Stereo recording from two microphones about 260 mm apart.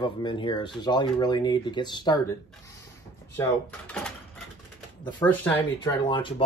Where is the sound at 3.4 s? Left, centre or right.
Centre.